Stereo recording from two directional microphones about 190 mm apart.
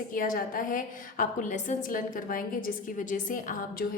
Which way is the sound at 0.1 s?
45° left (ahead or behind).